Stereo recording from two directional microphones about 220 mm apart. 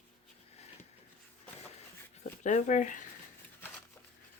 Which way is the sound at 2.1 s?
35° left (ahead or behind).